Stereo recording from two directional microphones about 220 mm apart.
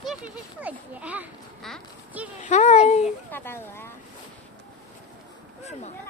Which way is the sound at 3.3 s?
10° left (ahead or behind).